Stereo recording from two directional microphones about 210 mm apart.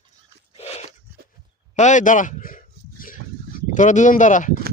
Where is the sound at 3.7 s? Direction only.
35° left (ahead or behind).